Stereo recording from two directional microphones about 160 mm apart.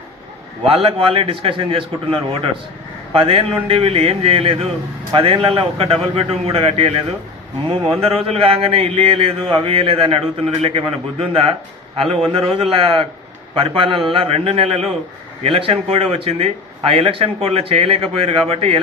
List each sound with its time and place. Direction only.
0.7 s a man's voice: 35° right (ahead or behind)
8.4 s a man's voice: 35° right (ahead or behind)